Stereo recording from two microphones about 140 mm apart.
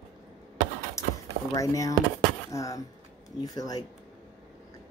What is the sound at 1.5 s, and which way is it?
Speech, 20° left (ahead or behind).